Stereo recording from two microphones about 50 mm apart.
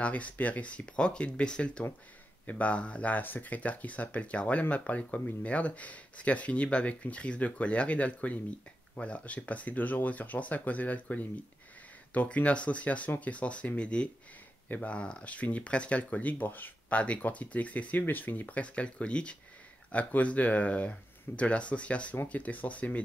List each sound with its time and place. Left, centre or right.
0.0 s speech: left
16.9 s speech: left